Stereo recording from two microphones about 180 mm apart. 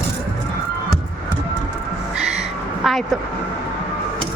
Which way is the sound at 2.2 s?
5° right (ahead or behind).